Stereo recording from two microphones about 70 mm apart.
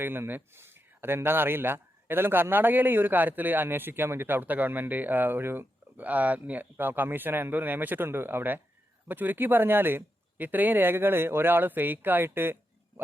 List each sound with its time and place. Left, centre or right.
0.0 s speech: right